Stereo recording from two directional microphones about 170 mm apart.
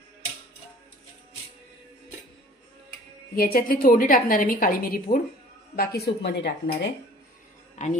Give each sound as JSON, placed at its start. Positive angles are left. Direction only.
{"t": 3.3, "sound": "a woman's voice", "side_deg": 60}
{"t": 5.8, "sound": "speech", "side_deg": 65}
{"t": 7.8, "sound": "speech", "side_deg": 45}